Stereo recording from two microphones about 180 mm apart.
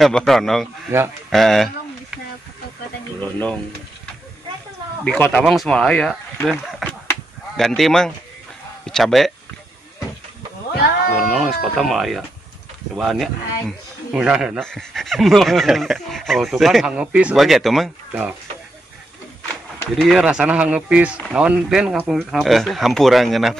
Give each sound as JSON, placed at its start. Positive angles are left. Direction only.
{"t": 0.0, "sound": "a man's voice", "side_deg": 0}
{"t": 0.9, "sound": "speech", "side_deg": -15}
{"t": 1.3, "sound": "a sound", "side_deg": 0}
{"t": 3.2, "sound": "speech", "side_deg": 10}
{"t": 5.0, "sound": "a man's voice", "side_deg": 5}
{"t": 10.7, "sound": "speech", "side_deg": 60}
{"t": 11.8, "sound": "a man's voice", "side_deg": 0}
{"t": 19.8, "sound": "a man's voice", "side_deg": 0}